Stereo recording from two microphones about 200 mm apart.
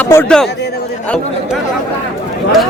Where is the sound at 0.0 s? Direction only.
10° left (ahead or behind).